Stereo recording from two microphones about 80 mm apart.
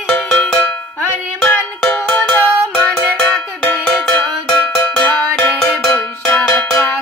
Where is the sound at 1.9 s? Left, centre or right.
Centre.